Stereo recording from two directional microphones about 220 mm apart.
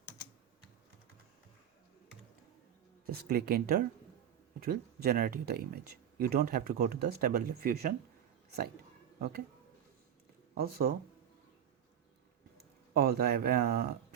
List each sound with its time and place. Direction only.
3.1 s speech: 45° right (ahead or behind)
10.6 s speech: 45° right (ahead or behind)
12.9 s speech: 45° right (ahead or behind)